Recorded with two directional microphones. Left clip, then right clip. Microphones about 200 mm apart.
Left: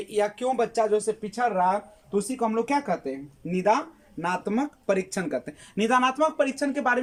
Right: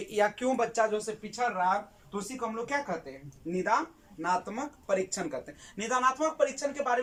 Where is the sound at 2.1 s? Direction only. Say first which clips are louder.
Left 9 dB; 45° left (ahead or behind).